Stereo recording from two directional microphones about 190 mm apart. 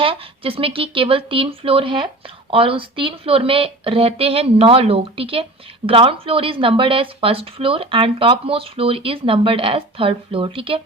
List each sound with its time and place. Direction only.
0.0 s speech: 30° right (ahead or behind)